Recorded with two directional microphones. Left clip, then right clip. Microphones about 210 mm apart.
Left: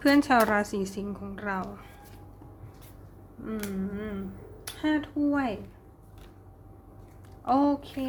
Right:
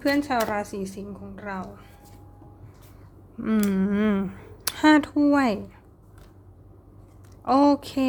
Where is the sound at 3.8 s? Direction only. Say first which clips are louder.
Right 11 dB; 35° right (ahead or behind).